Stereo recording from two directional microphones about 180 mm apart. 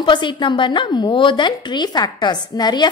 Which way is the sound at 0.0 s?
25° left (ahead or behind).